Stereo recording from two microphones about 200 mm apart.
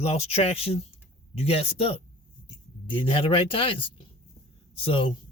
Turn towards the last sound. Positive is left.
turn(degrees=25)  # may be behind; listen again after turning